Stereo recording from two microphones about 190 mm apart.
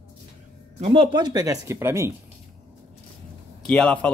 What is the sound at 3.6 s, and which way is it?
Speech, 5° left (ahead or behind).